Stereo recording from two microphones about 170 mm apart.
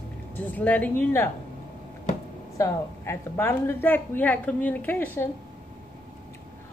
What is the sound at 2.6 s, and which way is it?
A woman's voice, 15° left (ahead or behind).